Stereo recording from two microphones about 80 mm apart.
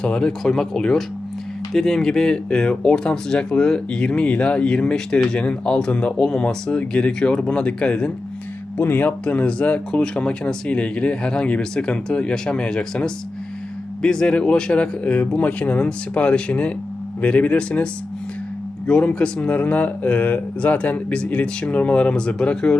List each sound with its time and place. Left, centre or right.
0.0 s speech: centre
8.8 s speech: left
18.9 s speech: centre